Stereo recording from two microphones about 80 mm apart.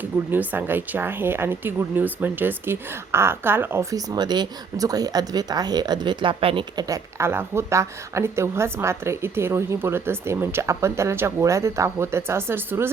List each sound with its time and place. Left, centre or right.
0.0 s speech: right
3.9 s speech: right
6.8 s a woman's voice: right